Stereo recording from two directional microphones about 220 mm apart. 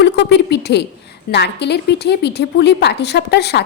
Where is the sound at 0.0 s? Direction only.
50° left (ahead or behind).